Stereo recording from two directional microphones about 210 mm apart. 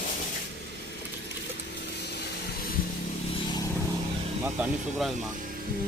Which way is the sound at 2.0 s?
50° left (ahead or behind).